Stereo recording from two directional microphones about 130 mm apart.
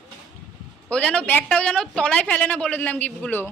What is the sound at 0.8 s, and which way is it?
A woman's voice, 10° left (ahead or behind).